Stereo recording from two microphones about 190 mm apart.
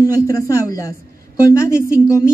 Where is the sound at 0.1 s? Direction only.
15° left (ahead or behind).